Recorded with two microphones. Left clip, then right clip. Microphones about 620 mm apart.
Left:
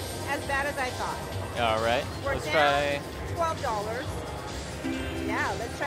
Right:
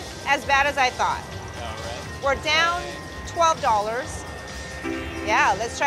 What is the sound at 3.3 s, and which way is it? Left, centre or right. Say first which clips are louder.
Speech: right 9 dB; right.